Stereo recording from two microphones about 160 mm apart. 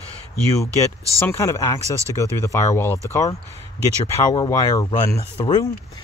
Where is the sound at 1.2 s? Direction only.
15° left (ahead or behind).